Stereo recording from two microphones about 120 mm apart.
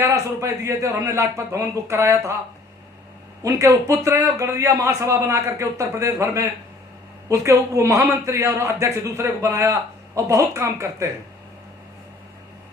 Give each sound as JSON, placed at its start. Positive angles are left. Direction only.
{"t": 0.0, "sound": "a man's voice", "side_deg": -25}
{"t": 3.4, "sound": "a man's voice", "side_deg": -25}